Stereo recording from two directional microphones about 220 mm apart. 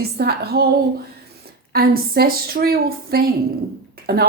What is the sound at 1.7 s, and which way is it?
A woman's voice, 45° right (ahead or behind).